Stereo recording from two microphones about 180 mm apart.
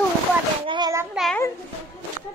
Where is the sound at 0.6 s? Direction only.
25° right (ahead or behind).